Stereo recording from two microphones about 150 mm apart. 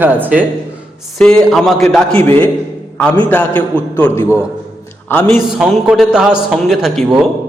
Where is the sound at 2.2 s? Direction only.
15° left (ahead or behind).